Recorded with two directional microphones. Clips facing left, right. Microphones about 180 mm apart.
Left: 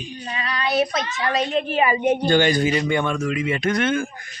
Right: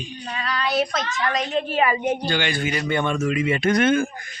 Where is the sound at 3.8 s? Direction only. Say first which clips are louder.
Right 5 dB; 45° right (ahead or behind).